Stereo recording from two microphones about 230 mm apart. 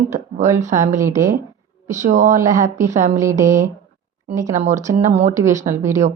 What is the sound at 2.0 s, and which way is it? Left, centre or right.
Speech, right.